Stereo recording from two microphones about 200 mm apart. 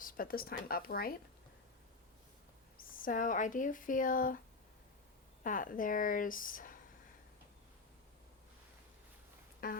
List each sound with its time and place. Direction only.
0.0 s speech: 45° left (ahead or behind)
2.9 s speech: 40° left (ahead or behind)
5.4 s speech: 45° left (ahead or behind)
9.6 s speech: 45° left (ahead or behind)